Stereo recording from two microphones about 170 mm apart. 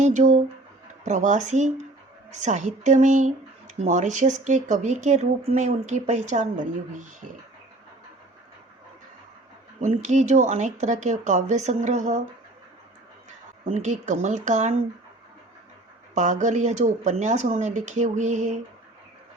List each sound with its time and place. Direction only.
0.0 s speech: 45° right (ahead or behind)
9.8 s speech: 45° right (ahead or behind)
13.7 s speech: 45° right (ahead or behind)
16.1 s speech: 45° right (ahead or behind)